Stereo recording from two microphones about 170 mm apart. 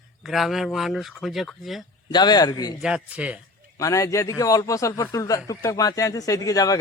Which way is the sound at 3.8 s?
20° left (ahead or behind).